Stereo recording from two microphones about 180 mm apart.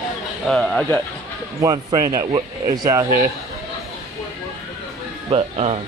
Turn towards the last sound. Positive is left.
turn(degrees=-35)  # may be behind; listen again after turning